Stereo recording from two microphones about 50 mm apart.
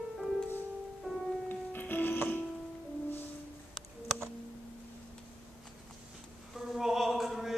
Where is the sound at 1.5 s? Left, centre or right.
Left.